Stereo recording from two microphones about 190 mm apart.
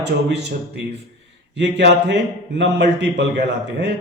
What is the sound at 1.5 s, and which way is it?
Speech, 65° right (ahead or behind).